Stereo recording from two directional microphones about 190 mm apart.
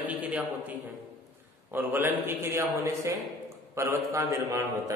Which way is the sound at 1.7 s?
10° right (ahead or behind).